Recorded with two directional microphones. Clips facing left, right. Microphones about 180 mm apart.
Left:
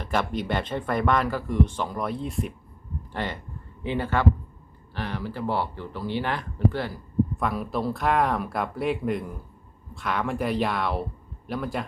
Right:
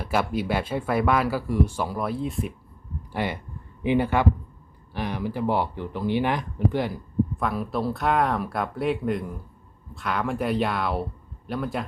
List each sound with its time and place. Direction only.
0.0 s speech: 10° right (ahead or behind)
3.1 s speech: 10° right (ahead or behind)
7.3 s speech: centre (ahead or behind)